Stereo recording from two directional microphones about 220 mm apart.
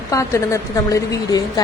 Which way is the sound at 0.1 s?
15° left (ahead or behind).